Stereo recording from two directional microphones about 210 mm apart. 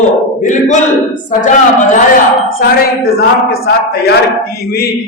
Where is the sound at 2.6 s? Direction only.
45° left (ahead or behind).